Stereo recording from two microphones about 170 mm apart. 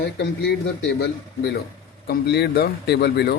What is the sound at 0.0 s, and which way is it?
A man's voice, 85° left.